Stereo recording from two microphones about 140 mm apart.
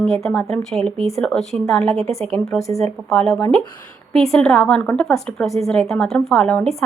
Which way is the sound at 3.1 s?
5° left (ahead or behind).